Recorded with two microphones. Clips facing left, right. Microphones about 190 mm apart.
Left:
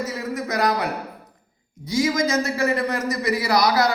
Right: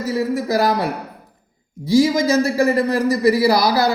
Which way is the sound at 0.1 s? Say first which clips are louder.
Right 8 dB; 30° right (ahead or behind).